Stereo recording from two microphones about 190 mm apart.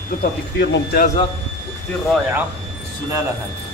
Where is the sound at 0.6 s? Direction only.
55° left (ahead or behind).